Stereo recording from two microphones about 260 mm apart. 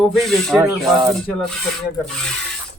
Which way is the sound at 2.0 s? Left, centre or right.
Centre.